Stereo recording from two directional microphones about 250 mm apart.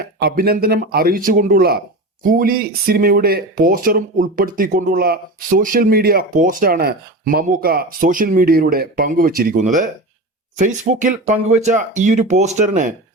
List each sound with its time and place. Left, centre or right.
0.0 s speech: right